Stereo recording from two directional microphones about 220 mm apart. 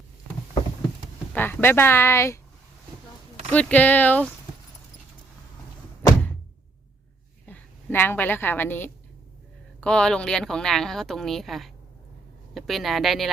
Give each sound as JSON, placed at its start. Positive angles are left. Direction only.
{"t": 1.3, "sound": "speech", "side_deg": 10}
{"t": 3.5, "sound": "speech", "side_deg": 5}
{"t": 7.4, "sound": "a woman's voice", "side_deg": 10}